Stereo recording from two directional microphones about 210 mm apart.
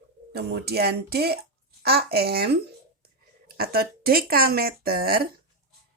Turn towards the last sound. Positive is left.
turn(degrees=-45)  # may be behind; listen again after turning